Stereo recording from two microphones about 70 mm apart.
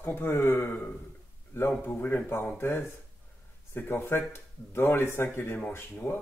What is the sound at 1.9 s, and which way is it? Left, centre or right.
Speech, left.